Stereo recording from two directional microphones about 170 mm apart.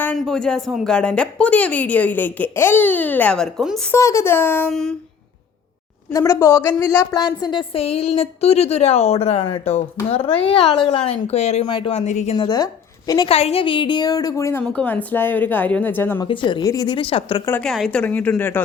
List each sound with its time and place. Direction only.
0.0 s a woman's voice: 5° left (ahead or behind)
3.9 s a woman's voice: 15° left (ahead or behind)
4.7 s a sound: 5° left (ahead or behind)
6.1 s a woman's voice: 15° left (ahead or behind); by 11.6 s 40° left (ahead or behind)
11.6 s a woman's voice: 30° left (ahead or behind)
12.5 s a woman's voice: 20° left (ahead or behind)
13.3 s a woman's voice: 35° left (ahead or behind); by 16.2 s 10° left (ahead or behind)
16.2 s a woman's voice: 30° left (ahead or behind)
17.6 s a woman's voice: centre (ahead or behind)